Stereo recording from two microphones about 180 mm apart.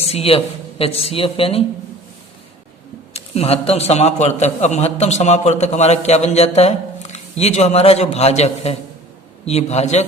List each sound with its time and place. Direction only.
0.0 s a man's voice: 35° left (ahead or behind)
3.1 s a man's voice: 35° left (ahead or behind)